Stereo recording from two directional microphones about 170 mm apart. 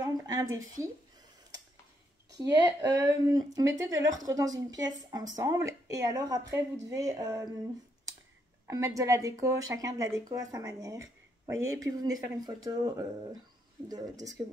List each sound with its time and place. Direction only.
0.0 s a sound: 25° right (ahead or behind)
2.3 s a woman's voice: 20° right (ahead or behind)
8.6 s a woman's voice: 20° right (ahead or behind)